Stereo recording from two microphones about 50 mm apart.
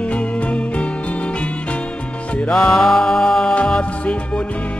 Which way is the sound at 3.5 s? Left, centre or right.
Left.